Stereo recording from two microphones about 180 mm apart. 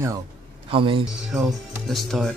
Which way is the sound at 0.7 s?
30° right (ahead or behind).